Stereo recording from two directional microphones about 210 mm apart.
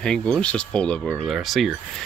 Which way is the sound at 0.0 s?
5° left (ahead or behind).